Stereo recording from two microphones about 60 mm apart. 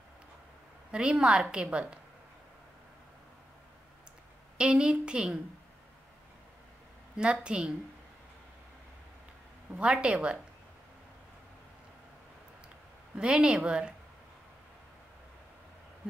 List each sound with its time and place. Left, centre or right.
0.9 s a woman's voice: centre
4.6 s a woman's voice: centre
7.4 s a woman's voice: centre
9.7 s a woman's voice: centre
13.1 s a woman's voice: centre